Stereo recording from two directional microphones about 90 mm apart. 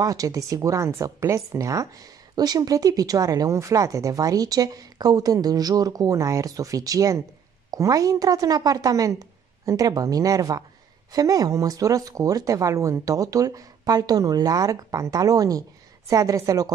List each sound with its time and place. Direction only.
0.0 s speech: 40° right (ahead or behind)